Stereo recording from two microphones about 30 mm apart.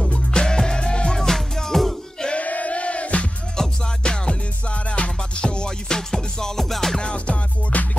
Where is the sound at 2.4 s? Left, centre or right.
Left.